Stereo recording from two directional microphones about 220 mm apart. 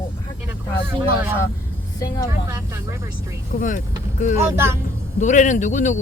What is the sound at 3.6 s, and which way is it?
Speech, 35° left (ahead or behind).